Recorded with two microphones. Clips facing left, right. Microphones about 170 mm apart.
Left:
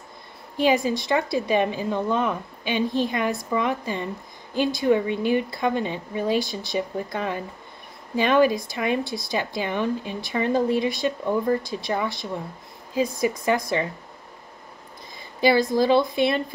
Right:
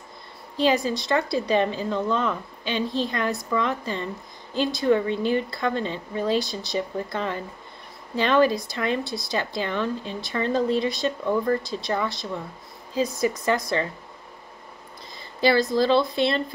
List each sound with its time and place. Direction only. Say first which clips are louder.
0.6 s speech: left 1 dB; 15° left (ahead or behind)
15.4 s speech: left 1 dB; 15° left (ahead or behind)